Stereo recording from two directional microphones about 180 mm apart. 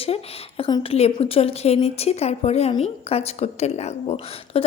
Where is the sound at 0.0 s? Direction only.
30° left (ahead or behind).